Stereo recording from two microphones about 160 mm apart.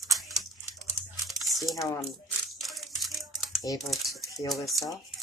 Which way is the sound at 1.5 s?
Centre (ahead or behind).